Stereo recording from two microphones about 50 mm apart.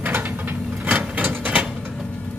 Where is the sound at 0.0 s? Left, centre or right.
Right.